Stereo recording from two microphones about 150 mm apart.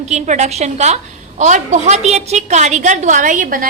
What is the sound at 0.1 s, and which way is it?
A woman's voice, 50° right (ahead or behind).